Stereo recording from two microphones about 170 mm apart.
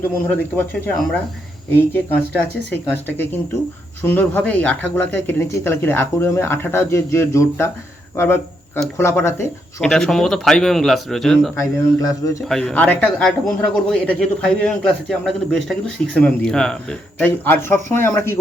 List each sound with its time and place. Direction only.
0.3 s a man's voice: 10° left (ahead or behind)
9.8 s a man's voice: centre (ahead or behind)
11.5 s speech: 20° left (ahead or behind)
12.5 s a man's voice: 5° left (ahead or behind)